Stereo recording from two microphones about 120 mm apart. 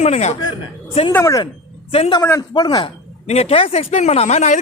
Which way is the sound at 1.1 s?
25° left (ahead or behind).